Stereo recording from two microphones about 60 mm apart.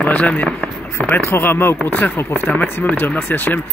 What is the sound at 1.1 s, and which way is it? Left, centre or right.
Speech, left.